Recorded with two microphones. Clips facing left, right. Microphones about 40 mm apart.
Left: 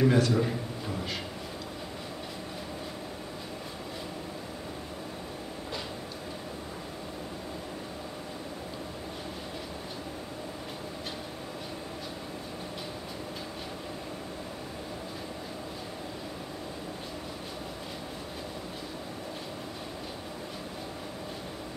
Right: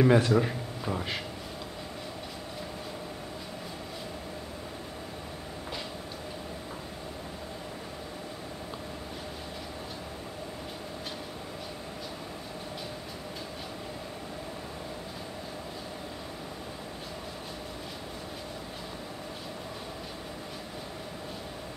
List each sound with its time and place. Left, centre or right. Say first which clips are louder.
0.0 s a man's voice: right 2 dB; centre